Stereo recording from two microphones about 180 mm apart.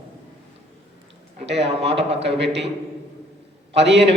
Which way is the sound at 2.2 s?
75° right (ahead or behind).